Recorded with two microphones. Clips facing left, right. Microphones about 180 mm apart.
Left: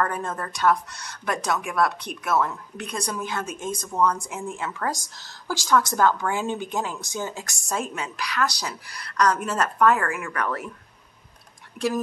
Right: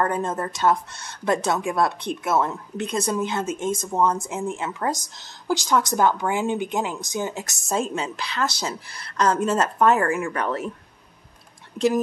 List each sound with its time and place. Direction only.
0.0 s speech: 20° right (ahead or behind)